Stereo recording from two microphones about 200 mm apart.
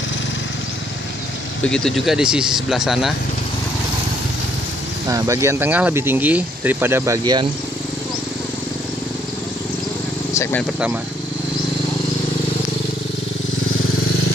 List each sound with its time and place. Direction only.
1.6 s speech: 5° left (ahead or behind)
5.0 s speech: 15° right (ahead or behind)
10.3 s speech: 15° left (ahead or behind)